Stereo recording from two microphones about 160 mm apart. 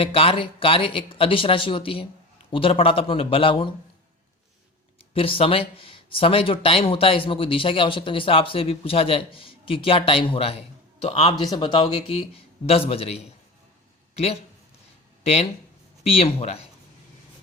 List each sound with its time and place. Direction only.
0.0 s speech: 35° left (ahead or behind)
5.1 s speech: 35° left (ahead or behind)
15.2 s speech: 40° left (ahead or behind)